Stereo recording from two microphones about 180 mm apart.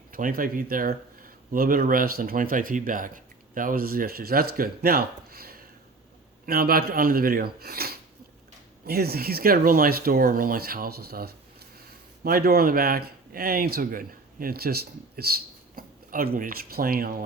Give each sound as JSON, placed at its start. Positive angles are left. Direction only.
{"t": 0.1, "sound": "speech", "side_deg": -50}